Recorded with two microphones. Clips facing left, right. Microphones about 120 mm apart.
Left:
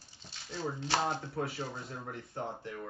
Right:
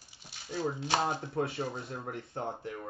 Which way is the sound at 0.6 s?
15° right (ahead or behind).